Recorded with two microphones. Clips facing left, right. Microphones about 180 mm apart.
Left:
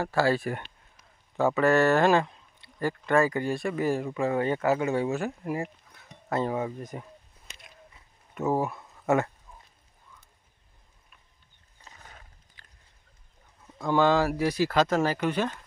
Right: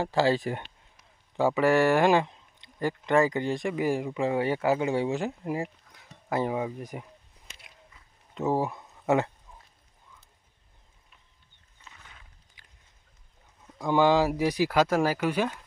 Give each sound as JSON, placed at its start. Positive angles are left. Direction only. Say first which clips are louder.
{"t": 0.0, "sound": "speech", "louder": "right 1 dB", "side_deg": -20}
{"t": 8.4, "sound": "speech", "louder": "even", "side_deg": -20}
{"t": 11.8, "sound": "wild animals", "louder": "left 2 dB", "side_deg": 40}
{"t": 12.6, "sound": "a sound", "louder": "left 3 dB", "side_deg": -15}
{"t": 13.8, "sound": "speech", "louder": "right 1 dB", "side_deg": -15}